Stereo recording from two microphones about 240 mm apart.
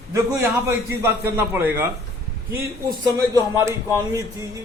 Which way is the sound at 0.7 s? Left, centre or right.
Centre.